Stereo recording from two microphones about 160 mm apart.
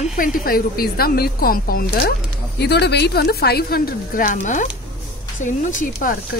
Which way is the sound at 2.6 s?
90° left.